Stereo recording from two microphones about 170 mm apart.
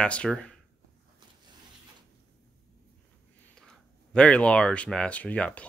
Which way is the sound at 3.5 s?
5° left (ahead or behind).